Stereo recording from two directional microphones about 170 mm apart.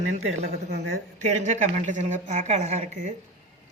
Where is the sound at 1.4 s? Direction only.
45° right (ahead or behind).